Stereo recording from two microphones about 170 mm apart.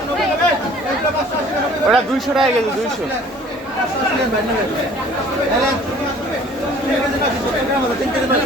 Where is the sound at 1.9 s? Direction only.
Centre (ahead or behind).